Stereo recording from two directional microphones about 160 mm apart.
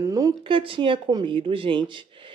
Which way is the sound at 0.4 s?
35° right (ahead or behind).